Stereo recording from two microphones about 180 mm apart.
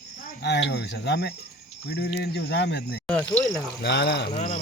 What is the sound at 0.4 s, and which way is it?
Speech, 70° left (ahead or behind).